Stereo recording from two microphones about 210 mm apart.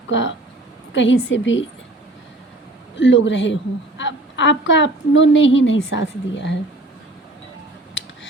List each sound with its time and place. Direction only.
0.1 s a woman's voice: 60° left (ahead or behind)
3.0 s a woman's voice: 60° left (ahead or behind)